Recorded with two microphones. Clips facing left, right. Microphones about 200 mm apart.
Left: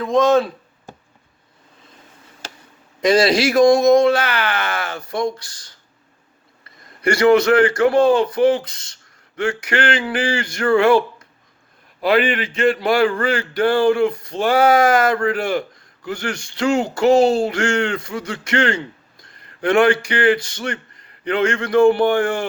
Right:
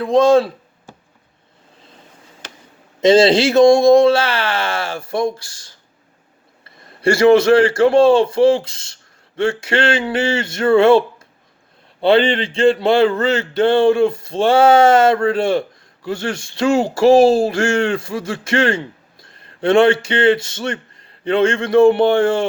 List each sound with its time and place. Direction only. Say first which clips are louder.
0.0 s speech: right 3 dB; 30° right (ahead or behind)
3.0 s speech: right 4 dB; 25° right (ahead or behind)